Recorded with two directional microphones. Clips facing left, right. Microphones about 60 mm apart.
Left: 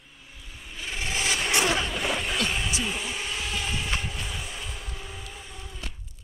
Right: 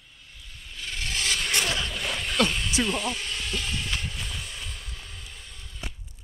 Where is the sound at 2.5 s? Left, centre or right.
Centre.